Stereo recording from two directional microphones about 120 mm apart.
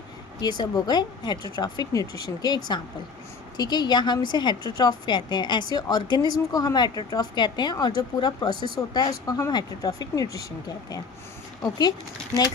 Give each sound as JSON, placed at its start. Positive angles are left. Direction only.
{"t": 0.4, "sound": "a woman's voice", "side_deg": 35}